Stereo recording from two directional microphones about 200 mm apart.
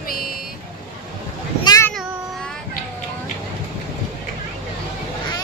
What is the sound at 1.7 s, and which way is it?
Child singing, 15° left (ahead or behind).